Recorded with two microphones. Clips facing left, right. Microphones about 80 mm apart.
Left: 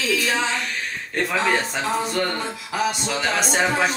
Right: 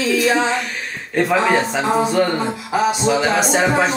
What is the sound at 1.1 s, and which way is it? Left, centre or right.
Speech, centre.